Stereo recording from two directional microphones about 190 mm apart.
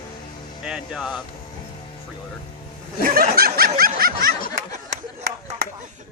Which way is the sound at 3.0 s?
50° right (ahead or behind).